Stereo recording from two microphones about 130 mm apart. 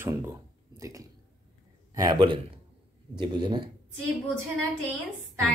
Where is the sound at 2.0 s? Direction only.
35° right (ahead or behind).